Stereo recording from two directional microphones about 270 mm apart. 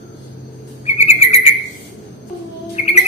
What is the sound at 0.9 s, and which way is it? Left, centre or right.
Bird vocalization, left.